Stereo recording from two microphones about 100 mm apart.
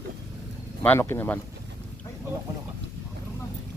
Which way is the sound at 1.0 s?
25° left (ahead or behind).